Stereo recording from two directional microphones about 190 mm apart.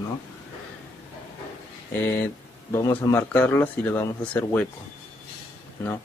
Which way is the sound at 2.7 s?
10° left (ahead or behind).